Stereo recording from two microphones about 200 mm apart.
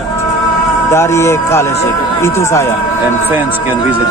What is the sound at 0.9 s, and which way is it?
Speech, 15° left (ahead or behind).